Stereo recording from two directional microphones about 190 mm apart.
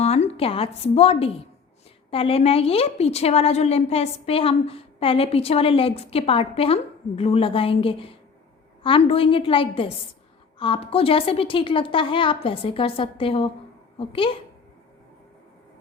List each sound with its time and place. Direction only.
0.0 s a woman's voice: 35° left (ahead or behind)